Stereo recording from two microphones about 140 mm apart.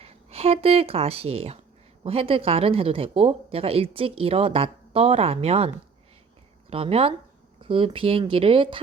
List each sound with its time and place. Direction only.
0.0 s speech: 45° right (ahead or behind)